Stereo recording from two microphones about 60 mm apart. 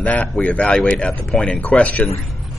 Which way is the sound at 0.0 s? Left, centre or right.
Left.